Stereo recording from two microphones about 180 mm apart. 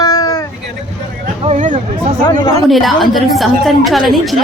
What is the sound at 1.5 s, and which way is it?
Speech, 40° right (ahead or behind).